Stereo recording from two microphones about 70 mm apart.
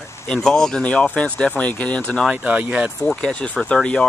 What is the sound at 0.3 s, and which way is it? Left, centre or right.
Speech, centre.